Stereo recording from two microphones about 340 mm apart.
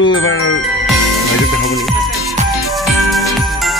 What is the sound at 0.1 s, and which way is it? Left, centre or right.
Music, left.